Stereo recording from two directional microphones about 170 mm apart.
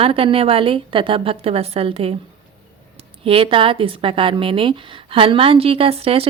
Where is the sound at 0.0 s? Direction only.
30° right (ahead or behind).